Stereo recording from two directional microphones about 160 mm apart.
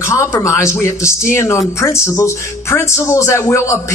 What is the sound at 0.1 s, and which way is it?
Speech, 20° left (ahead or behind).